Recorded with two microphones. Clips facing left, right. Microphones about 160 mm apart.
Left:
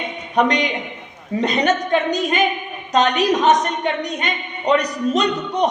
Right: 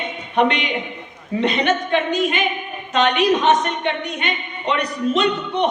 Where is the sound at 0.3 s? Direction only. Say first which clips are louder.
Left 1 dB; 40° left (ahead or behind).